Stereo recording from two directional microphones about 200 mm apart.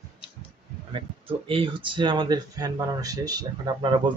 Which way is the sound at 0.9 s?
25° right (ahead or behind).